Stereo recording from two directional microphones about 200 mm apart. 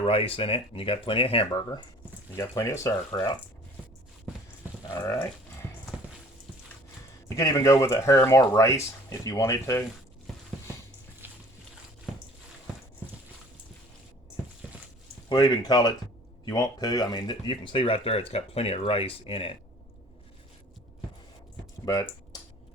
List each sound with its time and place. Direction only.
0.0 s speech: 30° left (ahead or behind)
2.3 s speech: 15° left (ahead or behind)
4.8 s livestock: 20° left (ahead or behind)
7.3 s speech: 15° left (ahead or behind)
11.2 s a sound: 10° right (ahead or behind)
15.3 s speech: 20° left (ahead or behind)
21.8 s speech: 15° left (ahead or behind)